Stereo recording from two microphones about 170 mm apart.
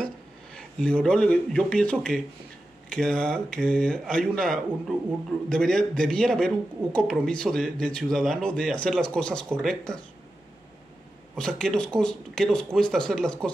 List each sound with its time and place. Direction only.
0.6 s speech: 5° left (ahead or behind)
11.3 s speech: 5° left (ahead or behind)